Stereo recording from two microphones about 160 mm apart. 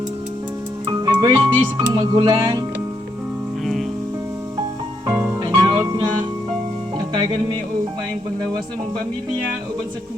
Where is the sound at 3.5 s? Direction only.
Centre (ahead or behind).